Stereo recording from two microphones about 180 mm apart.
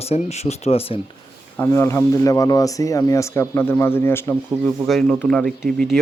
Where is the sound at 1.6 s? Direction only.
15° left (ahead or behind).